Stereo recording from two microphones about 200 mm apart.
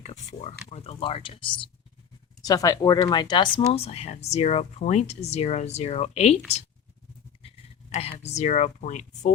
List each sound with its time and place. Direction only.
0.0 s speech: 35° left (ahead or behind)
7.4 s speech: 30° left (ahead or behind)